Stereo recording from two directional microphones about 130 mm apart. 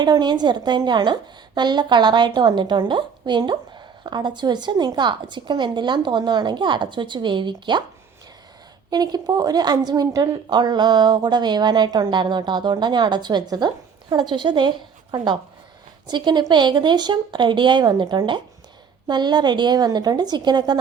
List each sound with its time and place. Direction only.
0.0 s a woman's voice: 35° right (ahead or behind)
8.9 s a woman's voice: 30° right (ahead or behind)